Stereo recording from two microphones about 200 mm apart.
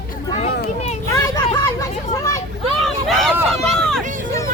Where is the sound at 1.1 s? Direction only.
15° left (ahead or behind).